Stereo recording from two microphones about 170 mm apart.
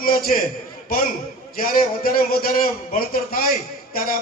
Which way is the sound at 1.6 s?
55° left (ahead or behind).